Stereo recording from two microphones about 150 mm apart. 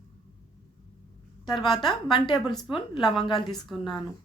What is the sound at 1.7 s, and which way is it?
A woman's voice, 35° left (ahead or behind).